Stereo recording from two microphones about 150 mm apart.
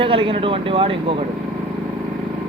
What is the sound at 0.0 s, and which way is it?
Speech, 35° right (ahead or behind).